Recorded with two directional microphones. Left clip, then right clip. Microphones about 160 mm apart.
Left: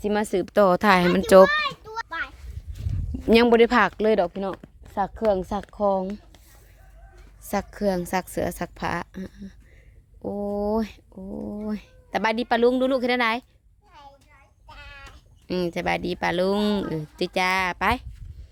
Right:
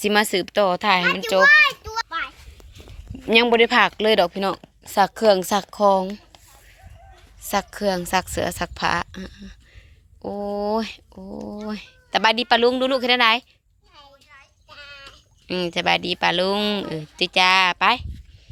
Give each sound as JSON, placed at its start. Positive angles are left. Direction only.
{"t": 0.0, "sound": "speech", "side_deg": -5}
{"t": 0.4, "sound": "speech", "side_deg": 30}
{"t": 1.5, "sound": "children playing", "side_deg": -45}
{"t": 2.0, "sound": "a sound", "side_deg": -30}
{"t": 3.2, "sound": "speech", "side_deg": 25}
{"t": 4.0, "sound": "speech", "side_deg": 5}
{"t": 4.9, "sound": "speech", "side_deg": -15}
{"t": 7.4, "sound": "a woman's voice", "side_deg": 10}
{"t": 10.2, "sound": "speech", "side_deg": -15}
{"t": 10.6, "sound": "a woman's voice", "side_deg": 10}
{"t": 11.1, "sound": "speech", "side_deg": -10}
{"t": 11.7, "sound": "a woman's voice", "side_deg": 10}
{"t": 14.7, "sound": "a woman's voice", "side_deg": 10}